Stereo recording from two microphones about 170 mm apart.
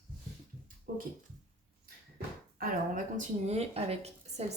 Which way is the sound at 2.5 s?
50° right (ahead or behind).